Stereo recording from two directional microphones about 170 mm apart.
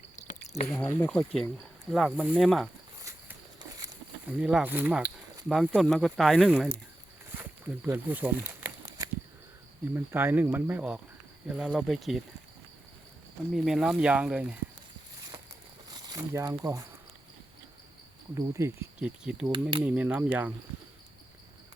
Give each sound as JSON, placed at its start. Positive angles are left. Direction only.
{"t": 0.3, "sound": "a sound", "side_deg": 45}
{"t": 0.7, "sound": "speech", "side_deg": 10}
{"t": 3.0, "sound": "walk", "side_deg": -20}
{"t": 4.3, "sound": "speech", "side_deg": -5}
{"t": 7.3, "sound": "a sound", "side_deg": -15}
{"t": 9.9, "sound": "speech", "side_deg": -15}
{"t": 13.5, "sound": "speech", "side_deg": 0}
{"t": 15.9, "sound": "speech", "side_deg": -25}
{"t": 18.3, "sound": "speech", "side_deg": -20}
{"t": 18.9, "sound": "speech", "side_deg": -5}